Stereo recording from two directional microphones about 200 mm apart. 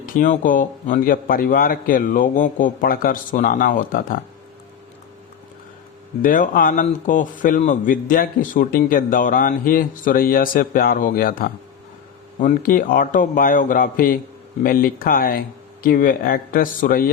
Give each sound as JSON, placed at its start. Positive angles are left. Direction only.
{"t": 0.0, "sound": "a man's voice", "side_deg": 40}
{"t": 6.2, "sound": "a man's voice", "side_deg": 45}